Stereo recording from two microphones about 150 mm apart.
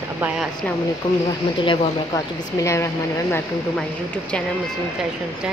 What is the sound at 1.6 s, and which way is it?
Speech, 35° left (ahead or behind).